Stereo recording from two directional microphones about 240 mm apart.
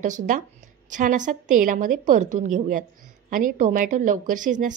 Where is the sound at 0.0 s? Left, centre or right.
Right.